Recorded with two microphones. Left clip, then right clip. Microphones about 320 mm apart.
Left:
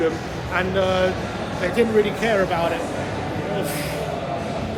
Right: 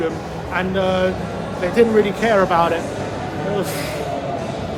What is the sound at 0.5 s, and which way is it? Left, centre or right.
Speech, centre.